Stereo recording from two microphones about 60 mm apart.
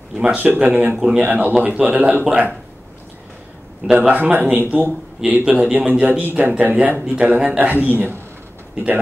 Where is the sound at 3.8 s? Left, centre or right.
Right.